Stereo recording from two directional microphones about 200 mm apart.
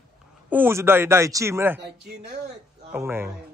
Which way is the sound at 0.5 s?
10° right (ahead or behind).